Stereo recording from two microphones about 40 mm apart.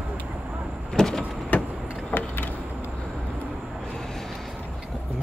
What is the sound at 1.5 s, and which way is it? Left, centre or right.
Vehicle, left.